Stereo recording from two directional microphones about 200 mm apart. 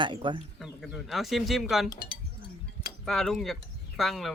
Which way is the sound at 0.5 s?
Centre (ahead or behind).